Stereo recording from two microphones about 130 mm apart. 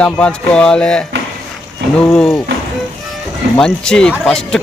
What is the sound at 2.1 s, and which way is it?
Speech, 5° left (ahead or behind).